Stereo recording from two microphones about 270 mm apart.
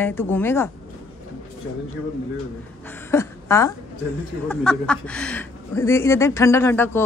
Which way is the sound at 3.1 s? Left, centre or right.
Centre.